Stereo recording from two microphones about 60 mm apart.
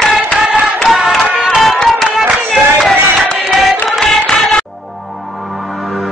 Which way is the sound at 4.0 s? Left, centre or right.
Centre.